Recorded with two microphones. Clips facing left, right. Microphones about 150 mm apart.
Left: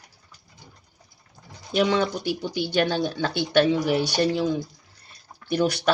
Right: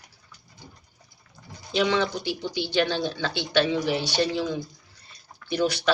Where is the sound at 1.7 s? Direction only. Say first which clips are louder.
Left 2 dB; 45° left (ahead or behind).